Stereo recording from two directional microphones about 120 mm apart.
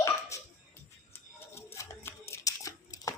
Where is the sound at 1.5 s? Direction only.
25° left (ahead or behind).